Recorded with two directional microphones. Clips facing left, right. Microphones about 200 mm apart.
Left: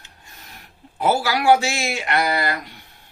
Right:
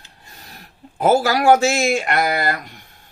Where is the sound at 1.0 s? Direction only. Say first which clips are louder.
Right 4 dB; 50° right (ahead or behind).